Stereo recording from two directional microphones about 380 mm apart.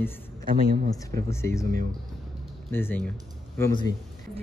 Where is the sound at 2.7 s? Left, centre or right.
Centre.